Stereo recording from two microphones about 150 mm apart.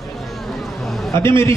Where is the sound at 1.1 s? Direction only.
15° left (ahead or behind).